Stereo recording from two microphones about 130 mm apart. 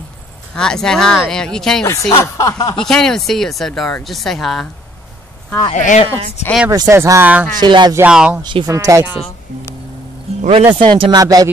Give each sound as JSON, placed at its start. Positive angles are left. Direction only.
{"t": 0.6, "sound": "speech", "side_deg": 5}
{"t": 1.9, "sound": "speech", "side_deg": 25}
{"t": 2.8, "sound": "speech", "side_deg": 5}
{"t": 5.7, "sound": "speech", "side_deg": 65}
{"t": 6.7, "sound": "speech", "side_deg": -25}
{"t": 7.6, "sound": "speech", "side_deg": -35}
{"t": 8.1, "sound": "speech", "side_deg": -5}
{"t": 8.4, "sound": "speech", "side_deg": -35}
{"t": 8.6, "sound": "speech", "side_deg": -25}
{"t": 10.4, "sound": "speech", "side_deg": -55}
{"t": 10.8, "sound": "speech", "side_deg": -35}